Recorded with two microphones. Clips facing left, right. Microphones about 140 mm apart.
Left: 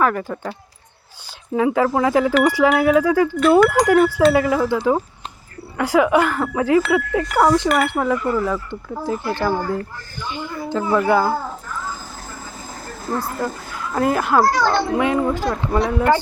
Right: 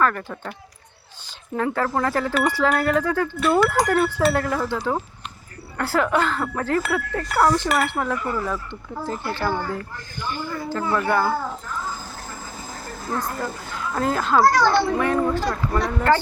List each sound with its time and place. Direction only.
0.0 s wind chime: 10° left (ahead or behind)
1.5 s wind chime: 5° left (ahead or behind)
6.9 s speech: 5° left (ahead or behind)
7.8 s wind chime: 10° left (ahead or behind)
13.1 s wind chime: 10° left (ahead or behind)